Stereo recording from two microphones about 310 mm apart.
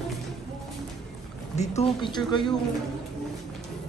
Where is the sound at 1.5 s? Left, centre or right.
Left.